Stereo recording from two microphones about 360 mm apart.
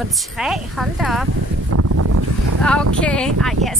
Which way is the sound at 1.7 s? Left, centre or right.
Right.